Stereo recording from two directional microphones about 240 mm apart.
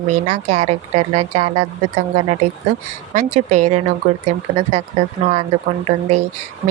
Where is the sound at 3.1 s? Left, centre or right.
Right.